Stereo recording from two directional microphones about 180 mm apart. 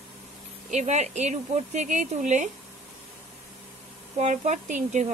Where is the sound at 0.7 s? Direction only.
40° right (ahead or behind).